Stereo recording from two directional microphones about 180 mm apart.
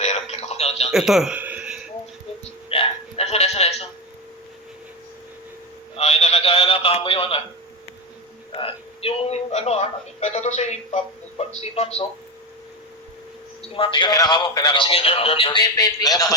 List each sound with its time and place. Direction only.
0.0 s music: 40° left (ahead or behind)
0.9 s a sound: centre (ahead or behind)
2.6 s hiccup: 30° left (ahead or behind)
6.0 s a sound: 35° left (ahead or behind)
8.5 s speech: 30° left (ahead or behind)
13.7 s speech: 30° left (ahead or behind)